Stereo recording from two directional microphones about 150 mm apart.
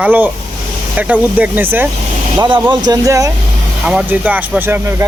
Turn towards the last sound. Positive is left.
turn(degrees=-15)  # may be behind; listen again after turning